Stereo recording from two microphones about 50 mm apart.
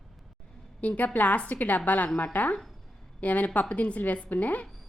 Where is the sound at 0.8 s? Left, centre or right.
Left.